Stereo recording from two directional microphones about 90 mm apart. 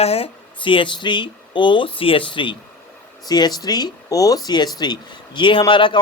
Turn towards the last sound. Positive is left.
turn(degrees=65)  # may be behind; listen again after turning